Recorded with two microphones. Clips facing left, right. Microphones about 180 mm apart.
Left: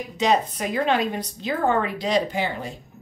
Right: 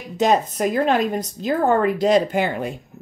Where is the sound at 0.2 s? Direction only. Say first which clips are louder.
Right 4 dB; 45° right (ahead or behind).